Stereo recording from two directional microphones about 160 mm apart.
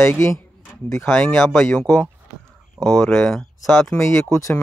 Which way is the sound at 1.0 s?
5° left (ahead or behind).